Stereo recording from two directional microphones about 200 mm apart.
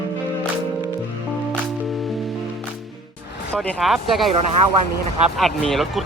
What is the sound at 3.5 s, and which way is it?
Speech, 5° left (ahead or behind).